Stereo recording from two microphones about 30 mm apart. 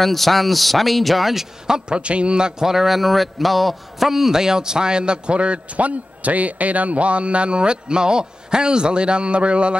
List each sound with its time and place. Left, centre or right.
0.0 s a man's voice: centre
2.0 s a man's voice: right
2.6 s a man's voice: centre
4.1 s a man's voice: centre; by 9.8 s right